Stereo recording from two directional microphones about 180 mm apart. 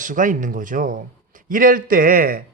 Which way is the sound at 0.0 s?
45° right (ahead or behind).